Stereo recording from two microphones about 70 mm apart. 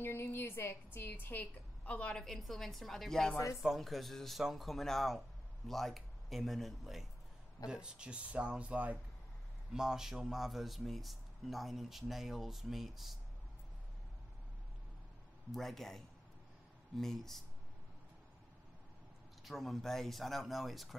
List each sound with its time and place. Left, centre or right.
0.0 s a woman's voice: left; by 2.2 s centre
2.2 s speech: centre
9.7 s speech: centre
15.5 s speech: centre
19.4 s speech: centre